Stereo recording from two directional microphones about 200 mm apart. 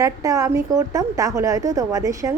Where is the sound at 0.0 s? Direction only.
15° right (ahead or behind).